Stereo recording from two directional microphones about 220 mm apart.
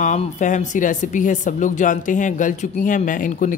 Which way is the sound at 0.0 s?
35° left (ahead or behind).